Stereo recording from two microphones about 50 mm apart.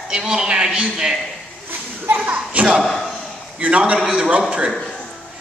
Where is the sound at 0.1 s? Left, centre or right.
Centre.